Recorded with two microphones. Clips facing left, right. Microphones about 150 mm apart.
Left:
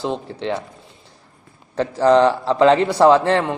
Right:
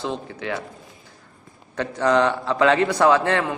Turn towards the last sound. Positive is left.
turn(degrees=30)  # may be behind; listen again after turning